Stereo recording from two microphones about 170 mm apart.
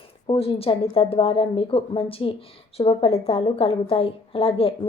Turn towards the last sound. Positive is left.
turn(degrees=35)  # may be behind; listen again after turning